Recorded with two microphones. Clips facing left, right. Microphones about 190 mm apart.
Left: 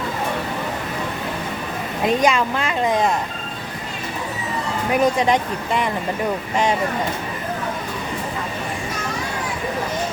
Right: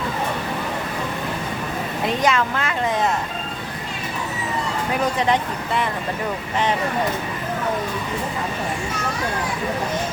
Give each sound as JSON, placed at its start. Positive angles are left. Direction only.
{"t": 2.2, "sound": "speech", "side_deg": 15}
{"t": 5.3, "sound": "speech", "side_deg": 15}